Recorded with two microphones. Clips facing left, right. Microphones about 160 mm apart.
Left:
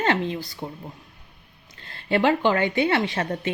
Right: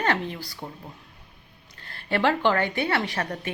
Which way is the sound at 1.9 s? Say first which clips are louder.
Left 3 dB; 20° left (ahead or behind).